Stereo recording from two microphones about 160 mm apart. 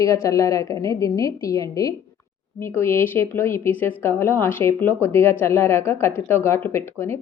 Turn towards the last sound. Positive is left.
turn(degrees=15)  # may be behind; listen again after turning